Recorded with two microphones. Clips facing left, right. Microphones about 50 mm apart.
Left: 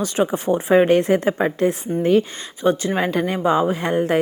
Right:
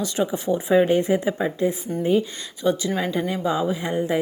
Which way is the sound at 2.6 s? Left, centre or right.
Left.